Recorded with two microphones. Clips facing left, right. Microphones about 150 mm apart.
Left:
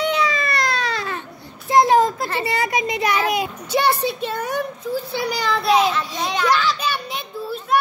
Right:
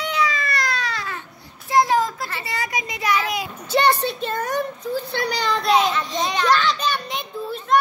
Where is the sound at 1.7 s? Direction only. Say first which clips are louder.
Left 4 dB; 20° left (ahead or behind).